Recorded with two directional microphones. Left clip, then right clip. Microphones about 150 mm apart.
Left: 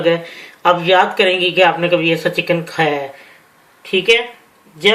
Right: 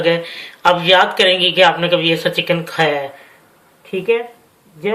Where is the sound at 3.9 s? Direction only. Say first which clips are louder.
Left 4 dB; 50° left (ahead or behind).